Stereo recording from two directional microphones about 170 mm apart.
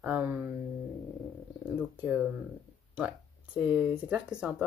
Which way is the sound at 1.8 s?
5° right (ahead or behind).